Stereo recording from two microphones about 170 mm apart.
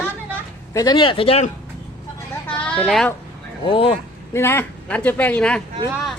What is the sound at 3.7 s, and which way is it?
Speech, 30° left (ahead or behind).